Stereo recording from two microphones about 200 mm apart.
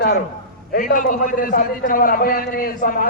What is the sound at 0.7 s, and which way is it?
A man's voice, 45° left (ahead or behind).